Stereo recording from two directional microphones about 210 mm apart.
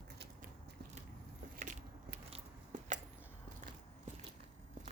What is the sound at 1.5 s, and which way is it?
Biting, 35° right (ahead or behind).